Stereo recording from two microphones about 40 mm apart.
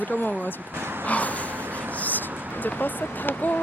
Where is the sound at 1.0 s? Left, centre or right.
Left.